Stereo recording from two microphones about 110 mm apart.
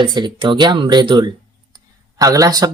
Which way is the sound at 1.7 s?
30° right (ahead or behind).